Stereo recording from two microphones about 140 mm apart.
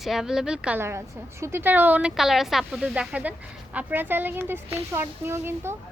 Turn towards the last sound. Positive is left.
turn(degrees=-15)  # may be behind; listen again after turning